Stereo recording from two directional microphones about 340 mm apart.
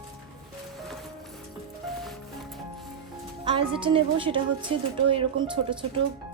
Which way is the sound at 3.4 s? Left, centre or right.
Centre.